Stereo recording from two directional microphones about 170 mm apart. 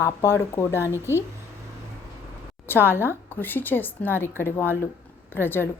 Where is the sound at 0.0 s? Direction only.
15° left (ahead or behind).